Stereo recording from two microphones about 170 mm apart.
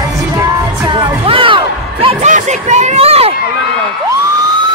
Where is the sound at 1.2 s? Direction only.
30° right (ahead or behind).